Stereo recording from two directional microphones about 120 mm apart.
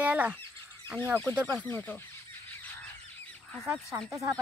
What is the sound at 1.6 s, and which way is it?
Speech, 15° left (ahead or behind).